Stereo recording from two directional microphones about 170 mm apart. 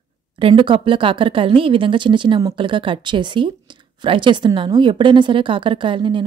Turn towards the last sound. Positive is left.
turn(degrees=-30)  # may be behind; listen again after turning